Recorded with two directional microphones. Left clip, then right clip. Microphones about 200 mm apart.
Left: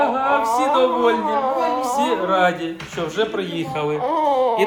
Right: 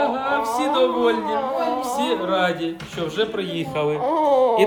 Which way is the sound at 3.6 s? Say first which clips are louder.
Right 1 dB; 15° right (ahead or behind).